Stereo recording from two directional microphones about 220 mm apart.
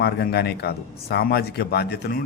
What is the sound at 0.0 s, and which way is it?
A man's voice, 50° left (ahead or behind).